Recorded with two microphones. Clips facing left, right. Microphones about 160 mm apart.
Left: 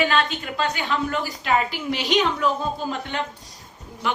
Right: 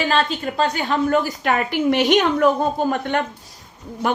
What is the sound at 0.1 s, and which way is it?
A woman's voice, 35° right (ahead or behind).